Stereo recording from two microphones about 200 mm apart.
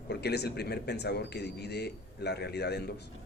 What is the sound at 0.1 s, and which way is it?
A man's voice, 55° left (ahead or behind).